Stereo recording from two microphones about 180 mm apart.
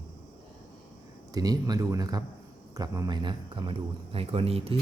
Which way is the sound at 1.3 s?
20° right (ahead or behind).